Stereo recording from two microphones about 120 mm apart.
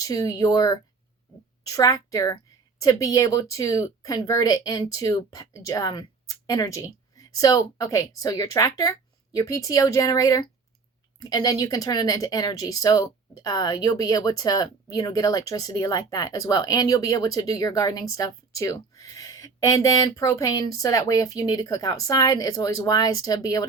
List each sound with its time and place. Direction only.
0.0 s a woman's voice: 30° left (ahead or behind)